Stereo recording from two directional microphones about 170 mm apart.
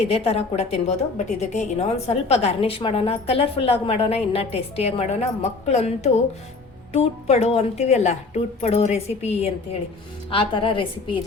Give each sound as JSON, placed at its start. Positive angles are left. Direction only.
{"t": 0.0, "sound": "a woman's voice", "side_deg": 35}